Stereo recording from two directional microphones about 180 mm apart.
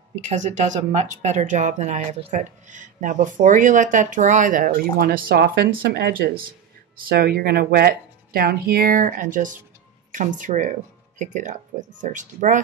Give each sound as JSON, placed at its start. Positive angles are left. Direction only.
{"t": 0.2, "sound": "speech", "side_deg": -40}